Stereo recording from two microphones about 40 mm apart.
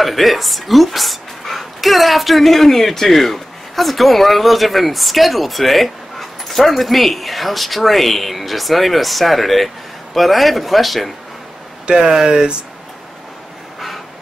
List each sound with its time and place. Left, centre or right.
0.0 s speech: centre
11.9 s speech: centre